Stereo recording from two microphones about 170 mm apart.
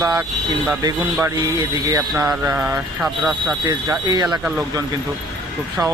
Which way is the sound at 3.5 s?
20° right (ahead or behind).